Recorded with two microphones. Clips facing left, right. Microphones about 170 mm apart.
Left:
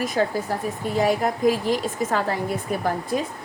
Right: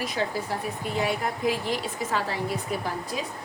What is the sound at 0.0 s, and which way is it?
A woman's voice, 45° left (ahead or behind).